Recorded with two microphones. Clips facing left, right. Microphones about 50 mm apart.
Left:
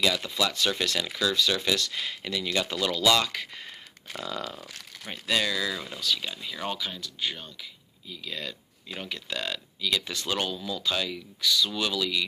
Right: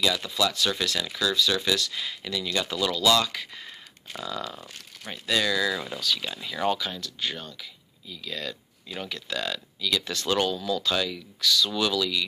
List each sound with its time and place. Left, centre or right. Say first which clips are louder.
0.0 s speech: right 1 dB; left
4.1 s speech: right 1 dB; left
5.1 s speech: right 1 dB; centre
5.7 s speech: right 4 dB; centre
6.0 s speech: left 3 dB; centre